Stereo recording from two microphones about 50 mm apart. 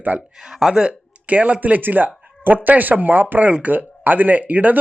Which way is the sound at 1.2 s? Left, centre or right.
Right.